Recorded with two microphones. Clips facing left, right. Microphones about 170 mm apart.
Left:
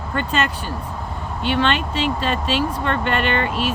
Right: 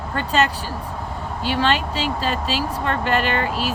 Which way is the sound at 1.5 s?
35° right (ahead or behind).